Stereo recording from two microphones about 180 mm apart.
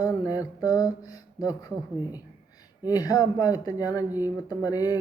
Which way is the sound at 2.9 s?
20° left (ahead or behind).